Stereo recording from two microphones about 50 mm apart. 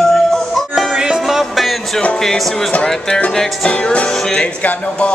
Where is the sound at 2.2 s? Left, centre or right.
Centre.